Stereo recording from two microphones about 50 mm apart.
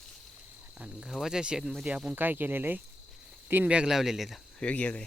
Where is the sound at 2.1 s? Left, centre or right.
Right.